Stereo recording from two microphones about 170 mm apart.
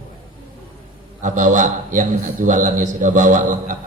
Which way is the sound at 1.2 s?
50° right (ahead or behind).